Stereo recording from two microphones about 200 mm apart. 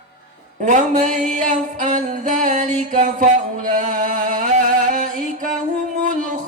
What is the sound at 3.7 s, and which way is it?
Music, 40° right (ahead or behind).